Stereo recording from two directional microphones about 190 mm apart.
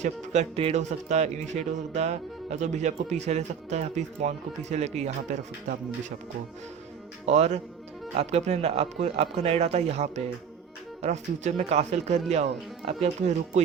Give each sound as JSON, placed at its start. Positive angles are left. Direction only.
{"t": 0.0, "sound": "speech", "side_deg": -35}
{"t": 7.3, "sound": "speech", "side_deg": -35}